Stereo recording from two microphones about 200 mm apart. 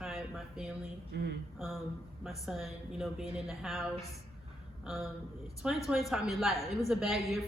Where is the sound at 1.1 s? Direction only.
50° right (ahead or behind).